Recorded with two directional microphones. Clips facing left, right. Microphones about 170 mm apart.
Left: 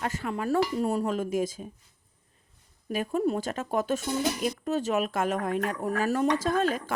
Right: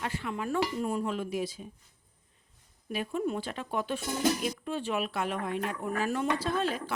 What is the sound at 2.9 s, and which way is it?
A woman's voice, 45° left (ahead or behind).